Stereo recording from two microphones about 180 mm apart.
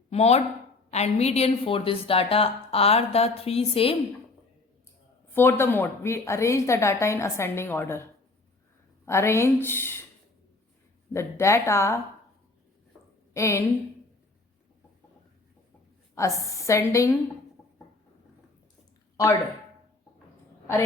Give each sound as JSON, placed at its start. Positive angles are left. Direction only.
{"t": 0.1, "sound": "a woman's voice", "side_deg": 35}
{"t": 5.3, "sound": "a woman's voice", "side_deg": 10}
{"t": 9.0, "sound": "a woman's voice", "side_deg": 15}
{"t": 11.1, "sound": "a woman's voice", "side_deg": 15}
{"t": 13.3, "sound": "a woman's voice", "side_deg": 15}
{"t": 16.1, "sound": "a woman's voice", "side_deg": 15}
{"t": 19.1, "sound": "speech", "side_deg": 15}